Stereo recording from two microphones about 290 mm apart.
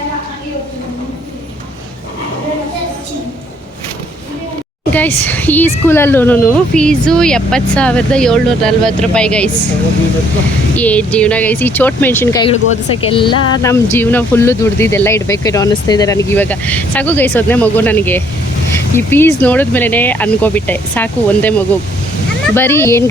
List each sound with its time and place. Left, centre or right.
4.9 s speech: centre
10.8 s speech: centre